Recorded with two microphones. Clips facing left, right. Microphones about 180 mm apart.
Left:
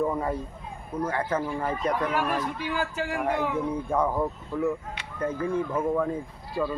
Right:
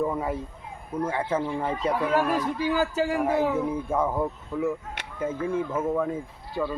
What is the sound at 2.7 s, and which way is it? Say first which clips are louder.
Speech: right 5 dB; 35° right (ahead or behind).